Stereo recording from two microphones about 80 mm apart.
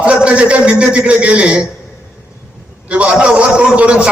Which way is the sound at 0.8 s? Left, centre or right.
Centre.